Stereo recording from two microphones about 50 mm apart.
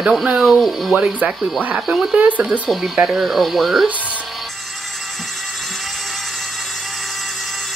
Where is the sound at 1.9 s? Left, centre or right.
Centre.